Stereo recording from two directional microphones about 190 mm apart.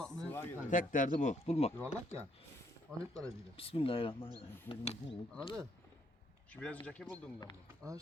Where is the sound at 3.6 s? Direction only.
30° left (ahead or behind).